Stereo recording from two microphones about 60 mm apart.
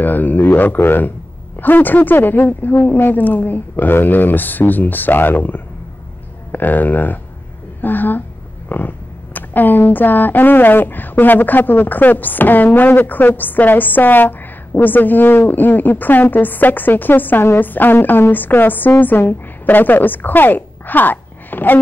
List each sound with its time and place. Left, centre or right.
0.0 s speech: left